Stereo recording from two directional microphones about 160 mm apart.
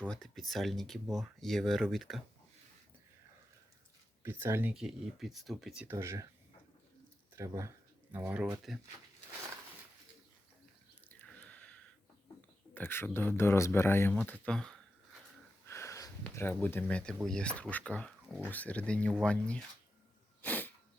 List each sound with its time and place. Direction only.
0.1 s speech: centre (ahead or behind)
4.2 s speech: 15° right (ahead or behind)
4.7 s speech: centre (ahead or behind)
7.3 s speech: 20° right (ahead or behind)
11.1 s a sound: 10° left (ahead or behind)
12.7 s speech: 15° left (ahead or behind)
15.6 s a sound: 15° left (ahead or behind)
16.3 s speech: 15° left (ahead or behind)
20.4 s sneeze: 10° left (ahead or behind)